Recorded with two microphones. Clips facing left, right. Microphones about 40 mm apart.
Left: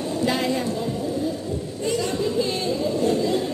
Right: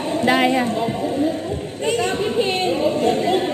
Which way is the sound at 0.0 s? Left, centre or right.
Right.